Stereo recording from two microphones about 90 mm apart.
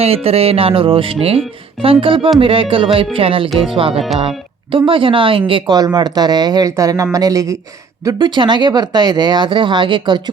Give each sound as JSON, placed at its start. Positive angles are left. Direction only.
{"t": 0.1, "sound": "speech", "side_deg": -90}
{"t": 4.7, "sound": "speech", "side_deg": -75}
{"t": 5.7, "sound": "speech", "side_deg": -50}
{"t": 8.2, "sound": "speech", "side_deg": -55}